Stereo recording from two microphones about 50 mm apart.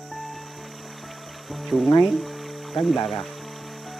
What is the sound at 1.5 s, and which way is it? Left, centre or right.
Speech, centre.